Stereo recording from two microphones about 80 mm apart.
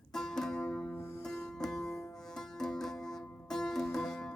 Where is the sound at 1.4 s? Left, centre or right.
Centre.